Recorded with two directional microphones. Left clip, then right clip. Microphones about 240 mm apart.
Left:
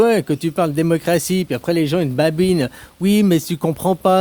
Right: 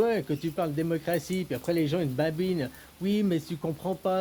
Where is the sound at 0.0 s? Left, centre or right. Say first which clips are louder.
Left 11 dB; left.